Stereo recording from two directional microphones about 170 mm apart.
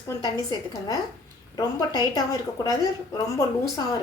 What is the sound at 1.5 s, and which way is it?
A woman's voice, 20° left (ahead or behind).